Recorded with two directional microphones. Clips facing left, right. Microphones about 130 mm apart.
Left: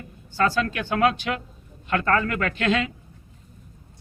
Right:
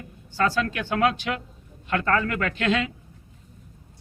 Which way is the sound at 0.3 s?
40° left (ahead or behind).